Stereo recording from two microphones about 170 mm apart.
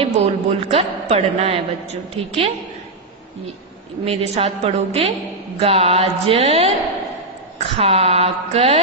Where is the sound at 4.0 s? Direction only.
35° right (ahead or behind).